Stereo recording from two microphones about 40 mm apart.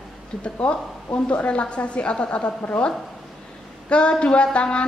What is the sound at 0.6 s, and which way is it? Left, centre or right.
A woman's voice, left.